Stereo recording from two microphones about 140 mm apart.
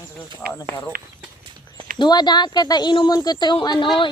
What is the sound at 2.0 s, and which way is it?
Speech, 30° left (ahead or behind).